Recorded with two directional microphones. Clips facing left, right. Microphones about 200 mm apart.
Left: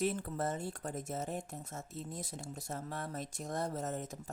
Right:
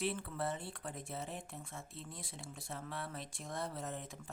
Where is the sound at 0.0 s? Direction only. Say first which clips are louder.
Left 4 dB; 45° left (ahead or behind).